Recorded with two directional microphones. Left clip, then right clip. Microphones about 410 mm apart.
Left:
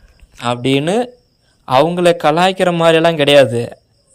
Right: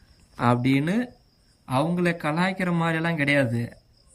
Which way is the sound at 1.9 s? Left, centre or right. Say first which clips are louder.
Left 14 dB; centre.